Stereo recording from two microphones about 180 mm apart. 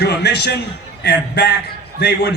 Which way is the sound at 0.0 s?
65° left (ahead or behind).